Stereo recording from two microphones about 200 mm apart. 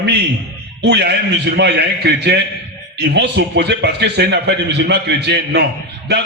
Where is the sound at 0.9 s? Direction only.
55° right (ahead or behind).